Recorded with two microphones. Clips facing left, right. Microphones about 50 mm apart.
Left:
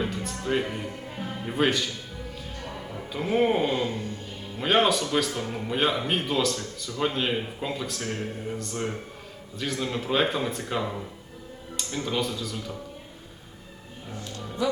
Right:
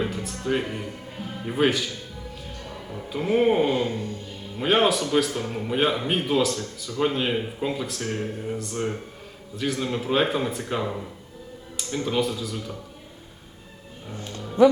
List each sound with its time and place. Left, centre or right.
0.0 s speech: centre
3.1 s speech: centre
14.1 s music: right